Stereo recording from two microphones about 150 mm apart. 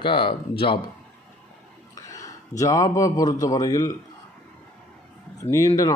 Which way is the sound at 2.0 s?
20° left (ahead or behind).